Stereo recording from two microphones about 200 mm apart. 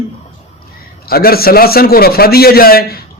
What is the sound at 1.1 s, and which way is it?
Speech, 50° left (ahead or behind).